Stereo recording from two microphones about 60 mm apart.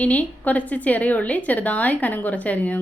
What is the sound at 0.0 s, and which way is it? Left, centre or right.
Speech, left.